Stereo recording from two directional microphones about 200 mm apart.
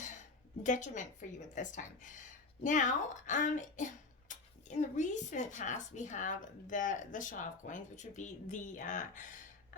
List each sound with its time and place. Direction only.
0.6 s a woman's voice: 35° left (ahead or behind)